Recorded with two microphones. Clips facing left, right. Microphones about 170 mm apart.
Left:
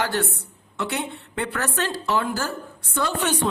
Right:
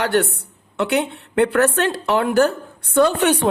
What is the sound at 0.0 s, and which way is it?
A woman's voice, 65° right (ahead or behind).